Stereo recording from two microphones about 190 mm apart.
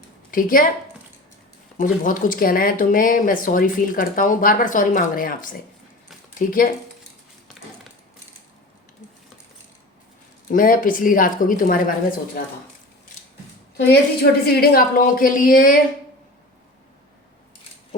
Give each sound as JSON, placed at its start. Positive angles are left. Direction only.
{"t": 0.3, "sound": "speech", "side_deg": 45}
{"t": 1.8, "sound": "speech", "side_deg": 45}
{"t": 10.5, "sound": "speech", "side_deg": 45}
{"t": 14.4, "sound": "speech", "side_deg": 55}